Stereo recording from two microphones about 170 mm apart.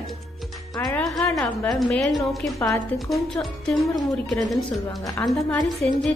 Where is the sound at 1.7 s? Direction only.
Centre (ahead or behind).